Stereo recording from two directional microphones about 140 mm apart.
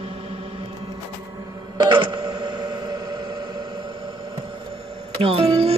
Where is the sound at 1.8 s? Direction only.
35° right (ahead or behind).